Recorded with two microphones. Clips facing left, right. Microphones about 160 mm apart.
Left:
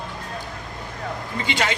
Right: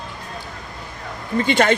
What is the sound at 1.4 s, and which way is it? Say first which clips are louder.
Speech: right 7 dB; 55° right (ahead or behind).